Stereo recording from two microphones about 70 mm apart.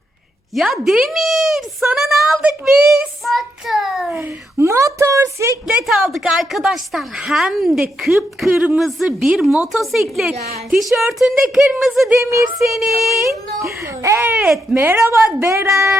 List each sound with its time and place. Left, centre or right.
0.5 s a woman's voice: centre
4.5 s a woman's voice: right
5.8 s a woman's voice: centre
12.1 s a woman's voice: right
12.5 s a woman's voice: centre
13.8 s a woman's voice: right
14.2 s speech: right
14.4 s speech: centre
14.9 s a woman's voice: right